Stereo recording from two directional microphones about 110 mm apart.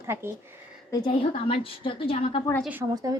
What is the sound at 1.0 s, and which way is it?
A woman's voice, 55° left (ahead or behind).